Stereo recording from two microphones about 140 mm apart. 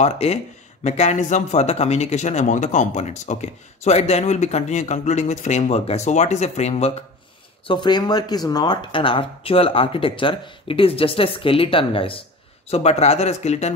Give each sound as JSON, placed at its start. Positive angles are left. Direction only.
{"t": 0.0, "sound": "speech", "side_deg": 50}
{"t": 7.6, "sound": "speech", "side_deg": 35}